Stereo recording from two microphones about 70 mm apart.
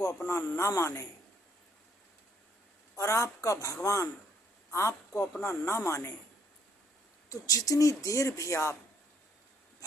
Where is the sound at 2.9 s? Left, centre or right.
Left.